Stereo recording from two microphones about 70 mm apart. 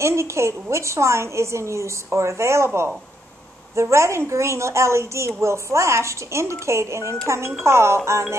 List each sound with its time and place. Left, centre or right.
0.0 s a woman's voice: right